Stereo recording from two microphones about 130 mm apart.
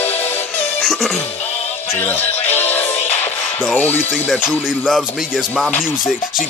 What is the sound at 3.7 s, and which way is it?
Speech, 15° left (ahead or behind).